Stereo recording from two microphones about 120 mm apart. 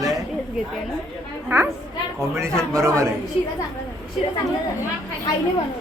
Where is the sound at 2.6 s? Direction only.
25° right (ahead or behind).